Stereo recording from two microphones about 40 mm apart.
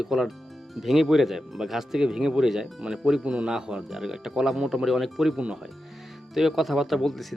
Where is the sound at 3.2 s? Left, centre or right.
Right.